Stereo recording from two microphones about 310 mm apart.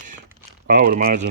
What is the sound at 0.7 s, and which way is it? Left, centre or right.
Speech, right.